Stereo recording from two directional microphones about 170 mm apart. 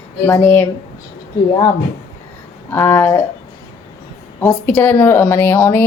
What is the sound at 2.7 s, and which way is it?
Speech, 10° left (ahead or behind).